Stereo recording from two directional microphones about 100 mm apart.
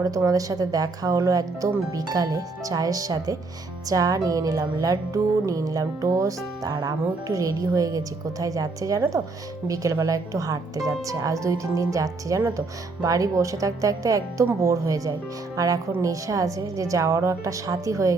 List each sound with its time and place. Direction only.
0.0 s speech: 35° right (ahead or behind)